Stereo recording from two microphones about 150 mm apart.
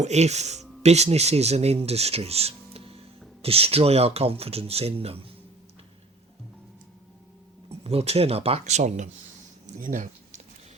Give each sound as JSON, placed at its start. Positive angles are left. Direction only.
{"t": 0.0, "sound": "speech", "side_deg": -50}
{"t": 7.7, "sound": "speech", "side_deg": -45}
{"t": 9.8, "sound": "a sound", "side_deg": -55}